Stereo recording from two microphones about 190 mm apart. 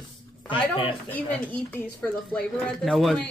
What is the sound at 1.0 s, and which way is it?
A woman's voice, 10° left (ahead or behind).